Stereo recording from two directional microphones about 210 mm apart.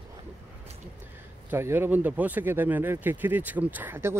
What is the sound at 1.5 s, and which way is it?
Speech, 10° right (ahead or behind).